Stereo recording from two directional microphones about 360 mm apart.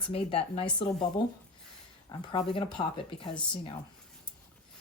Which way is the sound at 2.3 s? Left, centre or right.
Centre.